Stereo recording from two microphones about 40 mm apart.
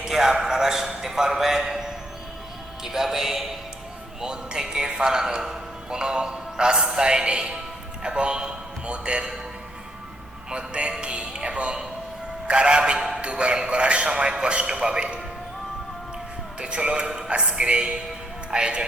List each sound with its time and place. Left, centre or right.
0.1 s a man's voice: centre
10.5 s a man's voice: right
16.6 s a man's voice: right